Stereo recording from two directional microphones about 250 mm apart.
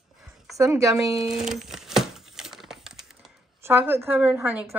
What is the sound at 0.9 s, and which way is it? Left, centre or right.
Crumpling, centre.